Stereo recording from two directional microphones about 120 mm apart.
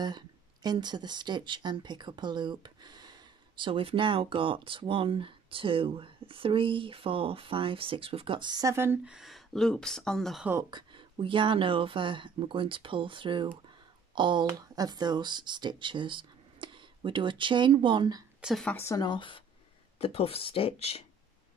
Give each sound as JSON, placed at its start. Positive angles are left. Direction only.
{"t": 0.0, "sound": "speech", "side_deg": -35}
{"t": 8.7, "sound": "speech", "side_deg": -15}
{"t": 9.1, "sound": "speech", "side_deg": 0}
{"t": 10.5, "sound": "speech", "side_deg": -30}
{"t": 11.0, "sound": "speech", "side_deg": -45}
{"t": 18.4, "sound": "a woman's voice", "side_deg": 0}
{"t": 18.7, "sound": "speech", "side_deg": 20}
{"t": 18.9, "sound": "speech", "side_deg": 40}